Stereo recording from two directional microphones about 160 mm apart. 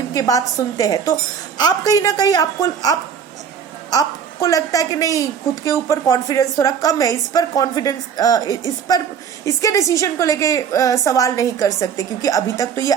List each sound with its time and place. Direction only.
0.1 s a woman's voice: 20° left (ahead or behind)